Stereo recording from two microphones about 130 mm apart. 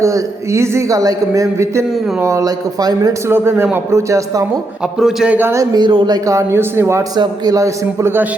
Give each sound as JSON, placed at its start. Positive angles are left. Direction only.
{"t": 0.0, "sound": "a man's voice", "side_deg": -25}
{"t": 4.9, "sound": "a man's voice", "side_deg": -5}
{"t": 5.7, "sound": "speech", "side_deg": -40}
{"t": 6.2, "sound": "a man's voice", "side_deg": -20}